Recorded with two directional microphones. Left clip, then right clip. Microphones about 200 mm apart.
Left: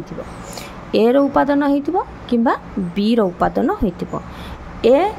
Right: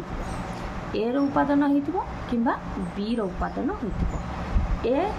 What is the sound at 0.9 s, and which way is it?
A woman's voice, 55° left (ahead or behind).